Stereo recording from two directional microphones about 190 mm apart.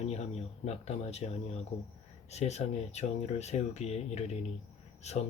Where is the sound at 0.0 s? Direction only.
35° left (ahead or behind).